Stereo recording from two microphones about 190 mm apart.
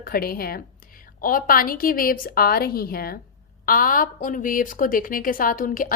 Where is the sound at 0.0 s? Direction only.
50° left (ahead or behind).